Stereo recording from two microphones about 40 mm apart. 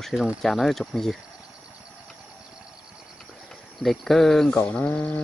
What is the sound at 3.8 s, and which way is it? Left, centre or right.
Speech, centre.